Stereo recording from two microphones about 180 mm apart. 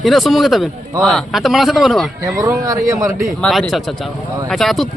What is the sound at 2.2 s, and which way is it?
A man's voice, 20° right (ahead or behind).